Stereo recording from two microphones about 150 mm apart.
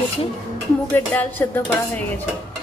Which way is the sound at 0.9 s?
10° left (ahead or behind).